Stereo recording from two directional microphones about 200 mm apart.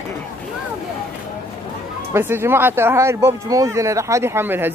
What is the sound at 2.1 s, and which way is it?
Speech, 10° right (ahead or behind).